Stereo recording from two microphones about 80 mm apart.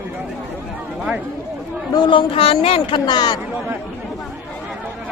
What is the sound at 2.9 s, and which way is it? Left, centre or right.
Speech, left.